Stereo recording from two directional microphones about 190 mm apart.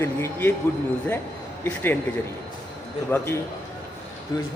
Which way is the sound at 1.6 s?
10° left (ahead or behind).